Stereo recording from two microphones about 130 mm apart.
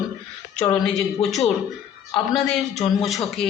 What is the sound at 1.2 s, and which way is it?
Speech, centre (ahead or behind).